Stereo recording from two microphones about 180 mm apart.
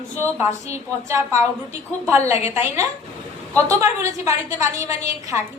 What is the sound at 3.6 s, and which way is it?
A woman's voice, 15° right (ahead or behind).